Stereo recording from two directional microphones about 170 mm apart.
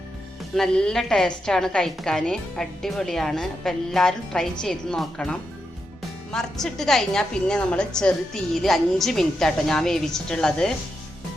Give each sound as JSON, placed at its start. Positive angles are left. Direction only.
{"t": 0.5, "sound": "a woman's voice", "side_deg": 5}